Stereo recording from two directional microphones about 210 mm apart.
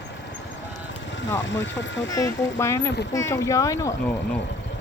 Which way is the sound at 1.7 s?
60° left (ahead or behind).